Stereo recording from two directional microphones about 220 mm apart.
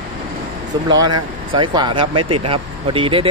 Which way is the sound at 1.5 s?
20° right (ahead or behind).